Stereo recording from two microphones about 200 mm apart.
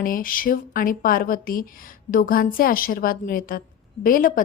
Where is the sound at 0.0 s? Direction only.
45° left (ahead or behind).